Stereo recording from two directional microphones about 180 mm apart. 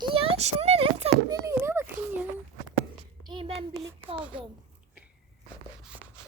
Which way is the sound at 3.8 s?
15° right (ahead or behind).